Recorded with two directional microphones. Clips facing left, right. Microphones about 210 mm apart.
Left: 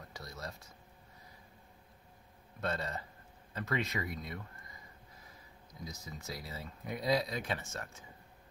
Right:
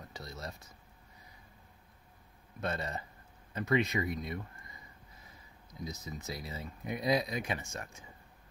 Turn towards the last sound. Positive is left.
turn(degrees=-15)  # may be behind; listen again after turning